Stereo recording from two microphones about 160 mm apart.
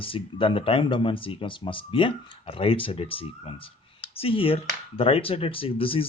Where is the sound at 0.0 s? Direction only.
35° left (ahead or behind).